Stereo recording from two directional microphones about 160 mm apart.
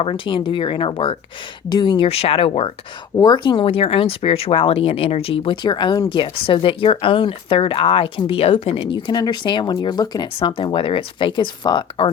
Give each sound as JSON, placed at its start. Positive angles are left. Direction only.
{"t": 0.0, "sound": "speech", "side_deg": 35}
{"t": 3.2, "sound": "speech", "side_deg": 25}